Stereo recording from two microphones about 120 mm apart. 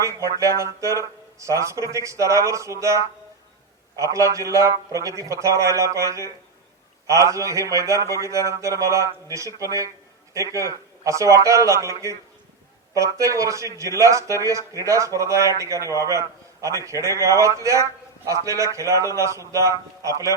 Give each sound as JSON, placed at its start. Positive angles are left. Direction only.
{"t": 0.0, "sound": "speech", "side_deg": -25}